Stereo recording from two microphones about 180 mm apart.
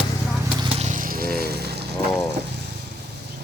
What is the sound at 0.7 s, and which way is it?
Vehicle, 40° right (ahead or behind).